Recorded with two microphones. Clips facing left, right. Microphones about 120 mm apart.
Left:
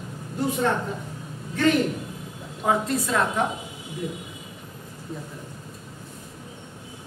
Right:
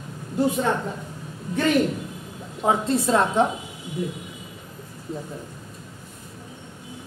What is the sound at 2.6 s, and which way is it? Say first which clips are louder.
Speech: right 2 dB; 30° right (ahead or behind).